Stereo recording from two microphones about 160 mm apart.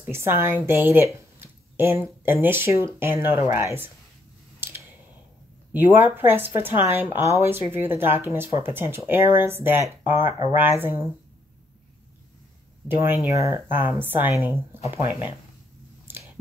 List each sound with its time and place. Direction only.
0.0 s speech: 15° right (ahead or behind)
5.7 s speech: 15° right (ahead or behind)
12.8 s speech: 15° right (ahead or behind)
16.1 s chewing: 10° right (ahead or behind)